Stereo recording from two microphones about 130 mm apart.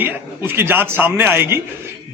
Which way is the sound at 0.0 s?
15° right (ahead or behind).